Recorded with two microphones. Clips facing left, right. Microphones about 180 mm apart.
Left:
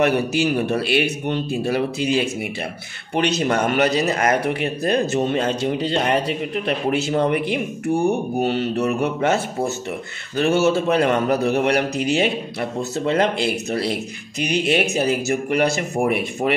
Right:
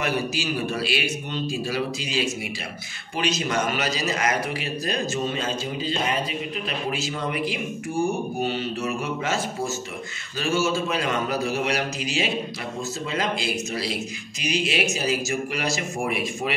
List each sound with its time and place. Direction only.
0.0 s a man's voice: 60° left (ahead or behind)